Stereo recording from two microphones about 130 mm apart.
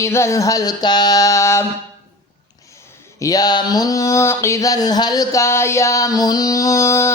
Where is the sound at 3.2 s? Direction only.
30° left (ahead or behind).